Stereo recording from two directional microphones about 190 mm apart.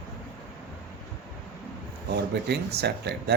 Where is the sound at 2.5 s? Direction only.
60° right (ahead or behind).